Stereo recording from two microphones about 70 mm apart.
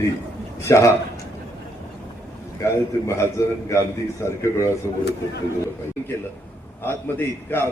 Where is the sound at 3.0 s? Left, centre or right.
Left.